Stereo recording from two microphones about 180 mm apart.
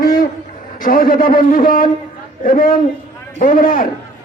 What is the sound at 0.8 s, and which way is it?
A man's voice, 55° left (ahead or behind).